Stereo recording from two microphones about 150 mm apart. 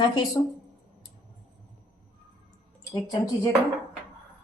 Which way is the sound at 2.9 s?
25° left (ahead or behind).